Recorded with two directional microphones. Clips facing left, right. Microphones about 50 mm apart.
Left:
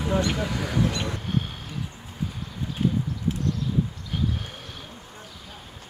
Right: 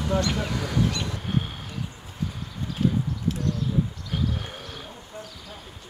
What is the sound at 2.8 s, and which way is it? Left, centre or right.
Clip-clop, centre.